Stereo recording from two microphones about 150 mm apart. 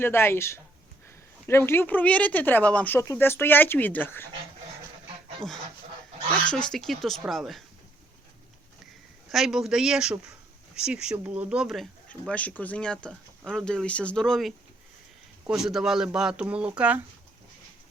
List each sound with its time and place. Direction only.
0.0 s speech: 15° left (ahead or behind)
6.7 s speech: centre (ahead or behind)
9.3 s speech: centre (ahead or behind)
12.0 s speech: 10° left (ahead or behind); by 17.0 s 10° right (ahead or behind)